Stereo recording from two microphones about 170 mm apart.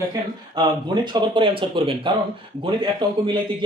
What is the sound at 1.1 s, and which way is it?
Speech, 30° right (ahead or behind).